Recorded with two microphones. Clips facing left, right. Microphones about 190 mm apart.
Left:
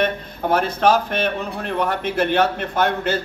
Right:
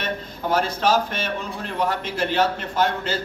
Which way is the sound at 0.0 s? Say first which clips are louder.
Left 6 dB; 60° left (ahead or behind).